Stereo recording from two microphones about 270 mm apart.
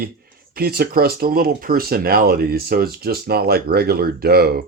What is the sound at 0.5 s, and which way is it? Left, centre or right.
Speech, right.